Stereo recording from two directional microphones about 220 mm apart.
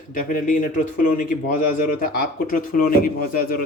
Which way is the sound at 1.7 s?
40° left (ahead or behind).